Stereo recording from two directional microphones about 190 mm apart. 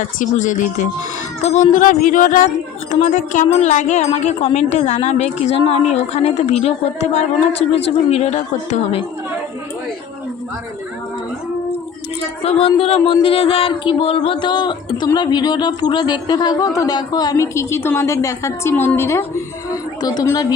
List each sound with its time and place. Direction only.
0.2 s speech: 40° left (ahead or behind)
12.4 s speech: 35° left (ahead or behind)